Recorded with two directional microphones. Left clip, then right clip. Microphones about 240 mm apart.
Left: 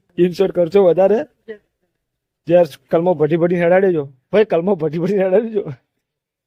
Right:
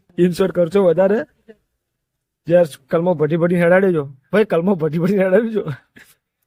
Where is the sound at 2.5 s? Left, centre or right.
Centre.